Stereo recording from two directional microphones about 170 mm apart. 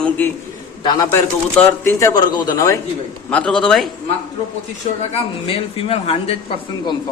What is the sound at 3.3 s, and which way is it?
Speech, 5° left (ahead or behind).